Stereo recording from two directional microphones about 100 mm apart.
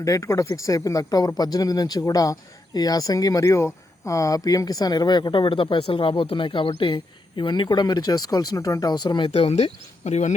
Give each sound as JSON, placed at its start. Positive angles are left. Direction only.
{"t": 0.0, "sound": "speech", "side_deg": 35}
{"t": 9.0, "sound": "speech", "side_deg": 55}
{"t": 9.3, "sound": "speech", "side_deg": 90}